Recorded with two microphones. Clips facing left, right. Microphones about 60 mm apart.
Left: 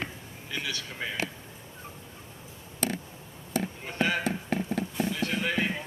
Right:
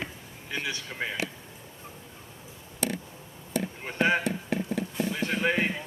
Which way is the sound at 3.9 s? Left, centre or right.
Right.